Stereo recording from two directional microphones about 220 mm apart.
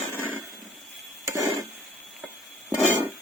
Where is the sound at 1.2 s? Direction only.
15° right (ahead or behind).